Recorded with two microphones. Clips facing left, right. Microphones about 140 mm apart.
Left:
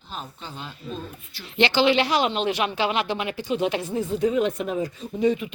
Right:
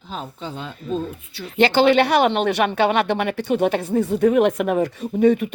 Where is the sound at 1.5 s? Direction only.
45° right (ahead or behind).